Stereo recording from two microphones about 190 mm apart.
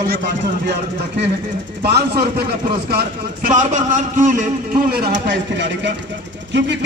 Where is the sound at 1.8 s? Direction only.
55° right (ahead or behind).